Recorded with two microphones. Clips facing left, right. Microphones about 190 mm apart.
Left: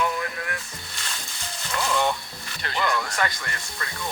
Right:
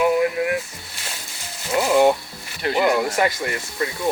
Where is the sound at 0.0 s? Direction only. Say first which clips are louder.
Right 10 dB; 15° right (ahead or behind).